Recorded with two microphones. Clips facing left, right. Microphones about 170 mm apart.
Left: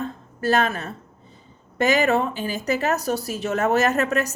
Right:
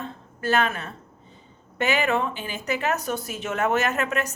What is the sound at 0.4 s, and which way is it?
A woman's voice, 40° left (ahead or behind).